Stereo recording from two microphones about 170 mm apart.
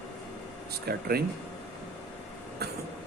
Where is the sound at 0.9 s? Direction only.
65° right (ahead or behind).